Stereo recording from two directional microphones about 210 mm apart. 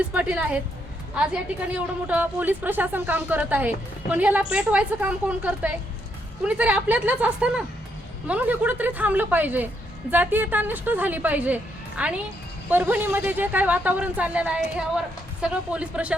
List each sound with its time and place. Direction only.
0.0 s a woman's voice: 5° right (ahead or behind)